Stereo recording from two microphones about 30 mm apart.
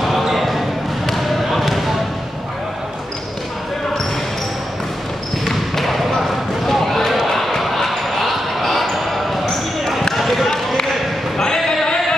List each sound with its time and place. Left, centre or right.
0.4 s basketball bounce: centre
5.4 s basketball bounce: centre
10.1 s basketball bounce: centre
11.3 s a sound: centre